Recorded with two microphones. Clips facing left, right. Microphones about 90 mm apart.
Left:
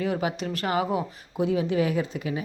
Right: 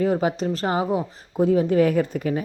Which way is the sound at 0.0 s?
35° right (ahead or behind).